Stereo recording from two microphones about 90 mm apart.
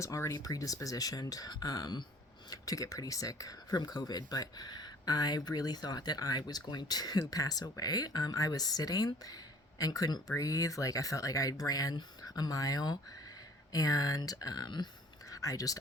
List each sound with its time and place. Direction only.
0.0 s speech: 35° left (ahead or behind)
15.3 s speech: 40° left (ahead or behind)